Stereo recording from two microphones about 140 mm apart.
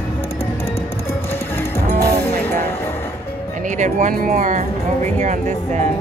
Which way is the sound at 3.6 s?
60° right (ahead or behind).